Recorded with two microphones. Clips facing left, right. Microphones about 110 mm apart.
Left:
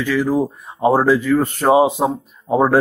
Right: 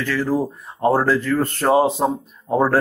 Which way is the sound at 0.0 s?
10° left (ahead or behind).